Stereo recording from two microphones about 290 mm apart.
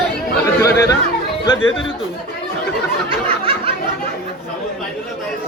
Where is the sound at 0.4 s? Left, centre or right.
Centre.